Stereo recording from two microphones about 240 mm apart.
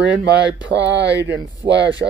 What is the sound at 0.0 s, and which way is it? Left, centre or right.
Speech, right.